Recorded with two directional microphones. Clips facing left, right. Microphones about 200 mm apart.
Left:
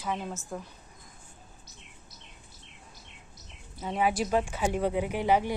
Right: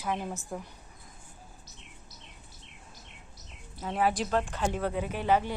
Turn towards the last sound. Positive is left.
turn(degrees=15)  # may be behind; listen again after turning